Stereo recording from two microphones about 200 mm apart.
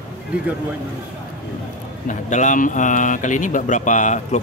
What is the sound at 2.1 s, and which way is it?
A man's voice, 40° left (ahead or behind).